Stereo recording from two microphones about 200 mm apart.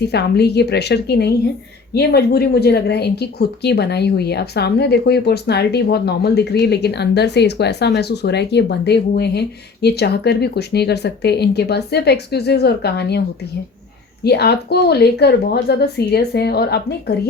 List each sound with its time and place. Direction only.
0.1 s speech: 55° left (ahead or behind)
14.3 s speech: 55° left (ahead or behind)